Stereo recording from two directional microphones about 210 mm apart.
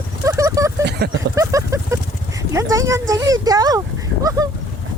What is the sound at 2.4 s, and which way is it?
Speech, 15° right (ahead or behind).